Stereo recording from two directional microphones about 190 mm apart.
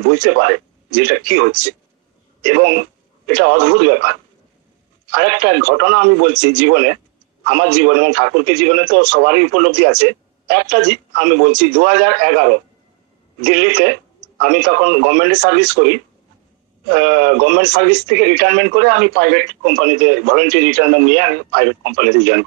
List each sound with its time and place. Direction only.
0.0 s a man's voice: 50° right (ahead or behind)
5.1 s a man's voice: 50° right (ahead or behind)